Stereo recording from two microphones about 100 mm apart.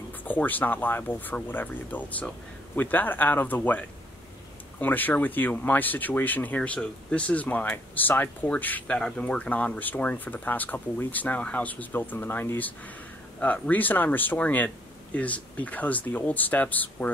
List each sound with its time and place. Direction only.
0.2 s speech: 15° left (ahead or behind)